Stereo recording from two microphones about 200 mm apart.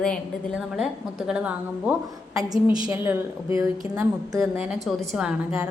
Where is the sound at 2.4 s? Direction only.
20° right (ahead or behind).